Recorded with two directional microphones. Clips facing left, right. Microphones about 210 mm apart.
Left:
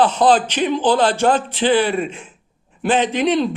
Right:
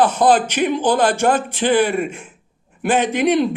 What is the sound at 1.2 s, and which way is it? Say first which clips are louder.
A man's voice: left 1 dB; 10° right (ahead or behind).